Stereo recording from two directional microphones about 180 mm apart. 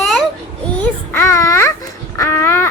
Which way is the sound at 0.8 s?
15° left (ahead or behind).